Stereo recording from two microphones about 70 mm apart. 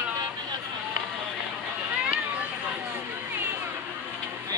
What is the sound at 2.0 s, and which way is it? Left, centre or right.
Run, centre.